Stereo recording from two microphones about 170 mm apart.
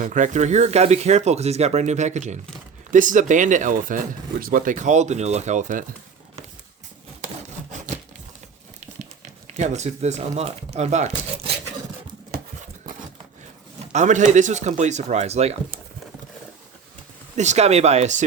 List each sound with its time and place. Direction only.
0.0 s speech: 50° right (ahead or behind)
9.6 s speech: 45° right (ahead or behind)
12.8 s a sound: 50° right (ahead or behind)
13.9 s speech: 45° right (ahead or behind)
17.3 s speech: 45° right (ahead or behind)